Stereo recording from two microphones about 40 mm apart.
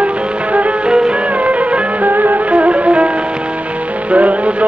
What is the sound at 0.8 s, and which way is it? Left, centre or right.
Music, centre.